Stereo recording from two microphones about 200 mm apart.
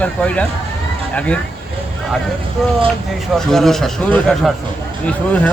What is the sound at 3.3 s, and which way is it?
Speech, centre (ahead or behind).